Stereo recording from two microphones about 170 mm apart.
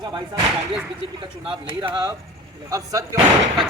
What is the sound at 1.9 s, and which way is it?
A man's voice, 20° right (ahead or behind).